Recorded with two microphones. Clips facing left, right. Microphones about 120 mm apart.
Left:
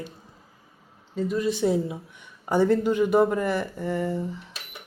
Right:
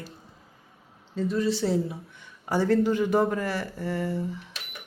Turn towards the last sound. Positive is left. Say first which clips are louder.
# left 2 dB
turn(degrees=15)  # may be behind; listen again after turning